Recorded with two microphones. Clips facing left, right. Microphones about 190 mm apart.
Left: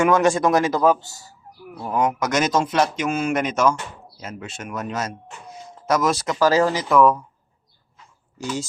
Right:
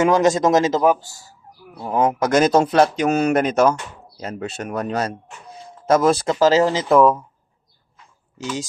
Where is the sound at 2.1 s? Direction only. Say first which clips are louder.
Right 5 dB; 30° right (ahead or behind).